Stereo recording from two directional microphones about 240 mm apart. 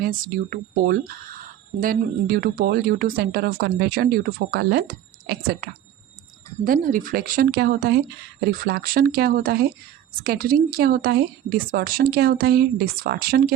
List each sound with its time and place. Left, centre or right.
0.0 s speech: right